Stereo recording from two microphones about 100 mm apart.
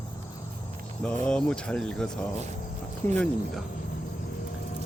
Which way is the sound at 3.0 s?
20° left (ahead or behind).